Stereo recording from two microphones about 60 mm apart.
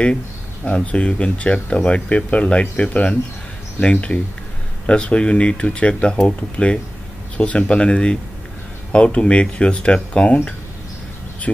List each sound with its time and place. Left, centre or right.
0.7 s speech: centre
11.5 s speech: centre